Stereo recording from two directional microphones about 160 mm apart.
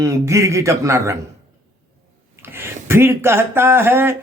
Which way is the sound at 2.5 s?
15° right (ahead or behind).